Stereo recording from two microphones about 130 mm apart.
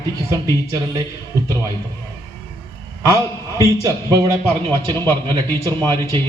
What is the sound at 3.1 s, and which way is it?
A man's voice, 25° right (ahead or behind).